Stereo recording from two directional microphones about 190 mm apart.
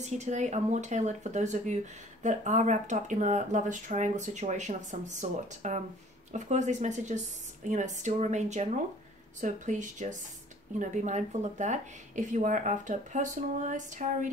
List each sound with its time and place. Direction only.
0.0 s speech: 40° right (ahead or behind)